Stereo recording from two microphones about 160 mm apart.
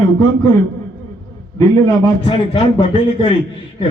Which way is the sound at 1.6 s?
25° left (ahead or behind).